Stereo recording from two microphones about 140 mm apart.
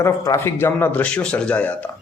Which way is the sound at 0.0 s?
20° left (ahead or behind).